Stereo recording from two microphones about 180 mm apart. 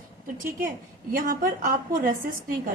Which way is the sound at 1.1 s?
50° right (ahead or behind).